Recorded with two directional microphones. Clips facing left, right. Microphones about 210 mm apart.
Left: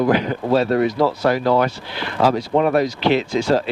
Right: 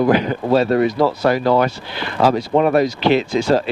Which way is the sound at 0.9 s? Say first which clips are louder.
Right 1 dB; 25° right (ahead or behind).